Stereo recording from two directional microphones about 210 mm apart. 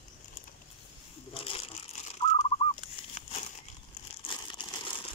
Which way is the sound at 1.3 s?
25° left (ahead or behind).